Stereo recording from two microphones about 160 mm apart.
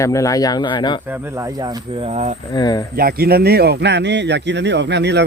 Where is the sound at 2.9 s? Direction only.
70° right (ahead or behind).